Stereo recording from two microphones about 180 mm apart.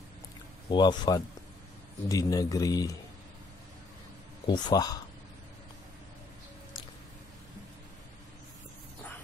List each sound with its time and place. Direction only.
0.7 s speech: 25° left (ahead or behind)
4.5 s speech: 25° left (ahead or behind)